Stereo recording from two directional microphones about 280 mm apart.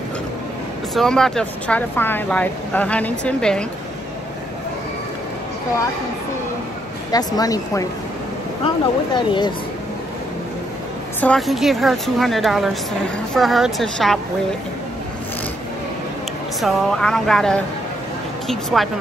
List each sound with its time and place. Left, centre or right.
0.9 s speech: centre
7.1 s speech: centre
11.1 s speech: centre
16.6 s speech: centre